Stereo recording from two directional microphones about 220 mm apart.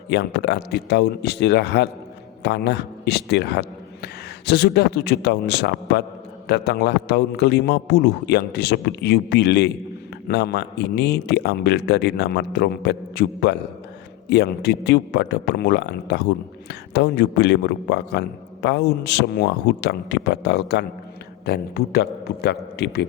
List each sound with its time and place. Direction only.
0.1 s a man's voice: 50° left (ahead or behind)